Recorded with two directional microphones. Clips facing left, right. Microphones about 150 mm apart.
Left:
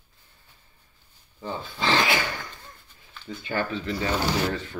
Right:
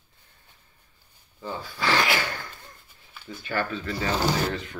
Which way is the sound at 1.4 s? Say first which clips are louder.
Left 1 dB; 20° left (ahead or behind).